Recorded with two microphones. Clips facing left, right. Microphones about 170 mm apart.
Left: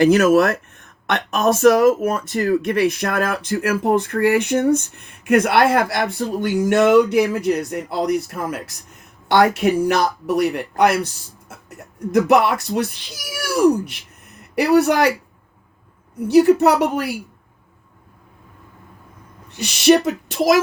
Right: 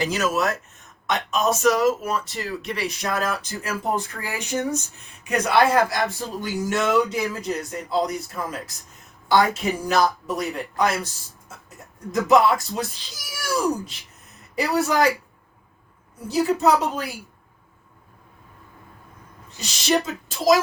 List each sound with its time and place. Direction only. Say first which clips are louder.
0.0 s speech: left 10 dB; 60° left (ahead or behind)
16.2 s speech: left 8 dB; 70° left (ahead or behind)
19.5 s speech: left 10 dB; 65° left (ahead or behind)